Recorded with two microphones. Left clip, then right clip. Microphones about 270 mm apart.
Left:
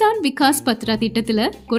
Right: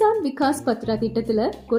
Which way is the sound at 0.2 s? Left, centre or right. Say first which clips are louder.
Left 5 dB; left.